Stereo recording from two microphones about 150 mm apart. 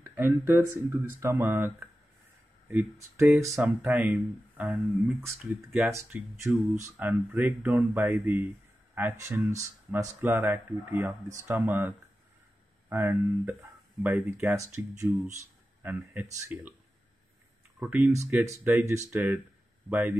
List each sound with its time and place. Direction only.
0.0 s speech: 15° right (ahead or behind)
12.9 s speech: 15° right (ahead or behind)
17.7 s speech: 10° right (ahead or behind)